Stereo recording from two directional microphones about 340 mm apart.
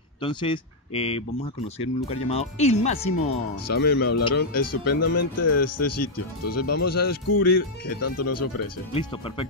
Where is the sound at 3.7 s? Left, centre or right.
Left.